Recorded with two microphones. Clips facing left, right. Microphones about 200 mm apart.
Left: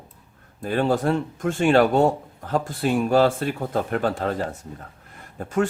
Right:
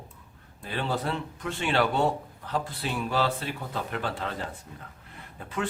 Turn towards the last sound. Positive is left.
turn(degrees=45)  # may be behind; listen again after turning